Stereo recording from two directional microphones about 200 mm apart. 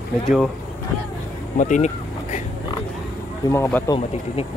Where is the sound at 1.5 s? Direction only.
40° left (ahead or behind).